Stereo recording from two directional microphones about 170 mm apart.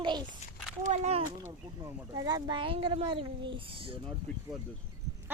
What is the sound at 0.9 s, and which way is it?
Speech, 40° right (ahead or behind).